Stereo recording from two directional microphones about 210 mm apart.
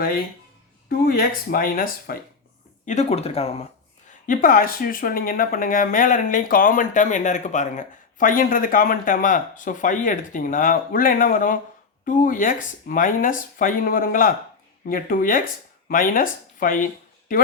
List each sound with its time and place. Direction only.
0.9 s speech: 45° left (ahead or behind)
2.8 s speech: 35° left (ahead or behind)
4.3 s speech: 40° left (ahead or behind)